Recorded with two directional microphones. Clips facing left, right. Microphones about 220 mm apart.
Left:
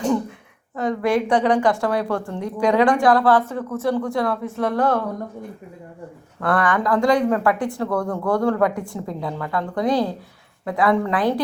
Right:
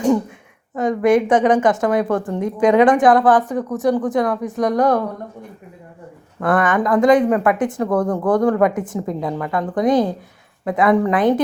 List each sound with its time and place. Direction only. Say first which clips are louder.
0.8 s a woman's voice: right 5 dB; 20° right (ahead or behind)
6.4 s a woman's voice: right 3 dB; 20° right (ahead or behind)